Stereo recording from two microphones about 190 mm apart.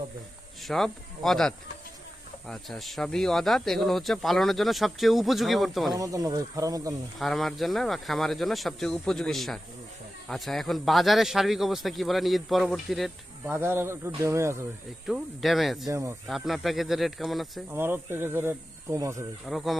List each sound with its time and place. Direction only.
0.6 s speech: centre (ahead or behind)
5.9 s speech: 20° right (ahead or behind)
7.2 s speech: centre (ahead or behind)
13.5 s speech: 15° right (ahead or behind)
15.0 s speech: centre (ahead or behind)
15.9 s speech: 15° right (ahead or behind)
16.2 s speech: centre (ahead or behind)
17.7 s speech: 10° right (ahead or behind)
19.5 s speech: centre (ahead or behind)